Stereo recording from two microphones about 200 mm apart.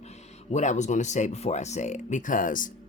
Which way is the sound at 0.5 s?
35° left (ahead or behind).